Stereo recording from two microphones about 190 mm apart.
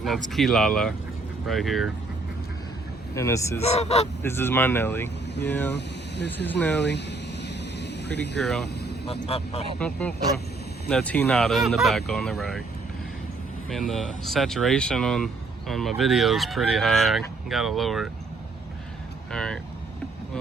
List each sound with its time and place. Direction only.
0.0 s speech: centre (ahead or behind)
3.2 s speech: 15° left (ahead or behind)
3.6 s speech: 35° left (ahead or behind)
4.2 s speech: 10° left (ahead or behind)
5.7 s speech: 65° left (ahead or behind)
6.3 s speech: 10° left (ahead or behind)
7.4 s a sound: 65° left (ahead or behind)
8.4 s speech: centre (ahead or behind)
9.0 s speech: 30° left (ahead or behind)
9.7 s speech: 5° left (ahead or behind)
13.7 s speech: centre (ahead or behind)
19.3 s speech: 5° left (ahead or behind)